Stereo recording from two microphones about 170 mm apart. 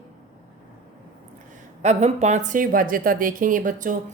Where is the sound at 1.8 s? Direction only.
40° right (ahead or behind).